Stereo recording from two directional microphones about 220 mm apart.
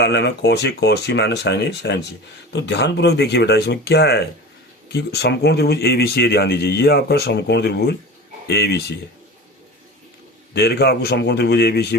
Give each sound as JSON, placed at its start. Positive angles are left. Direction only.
{"t": 0.0, "sound": "speech", "side_deg": 50}
{"t": 10.5, "sound": "speech", "side_deg": 45}